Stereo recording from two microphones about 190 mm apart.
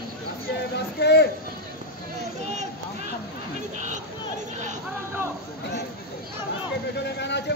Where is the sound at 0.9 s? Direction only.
60° left (ahead or behind).